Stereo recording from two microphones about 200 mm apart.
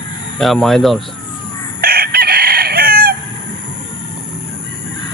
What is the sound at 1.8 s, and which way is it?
Chicken, 50° right (ahead or behind).